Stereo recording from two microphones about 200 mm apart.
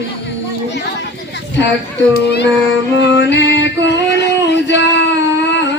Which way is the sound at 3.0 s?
60° left (ahead or behind).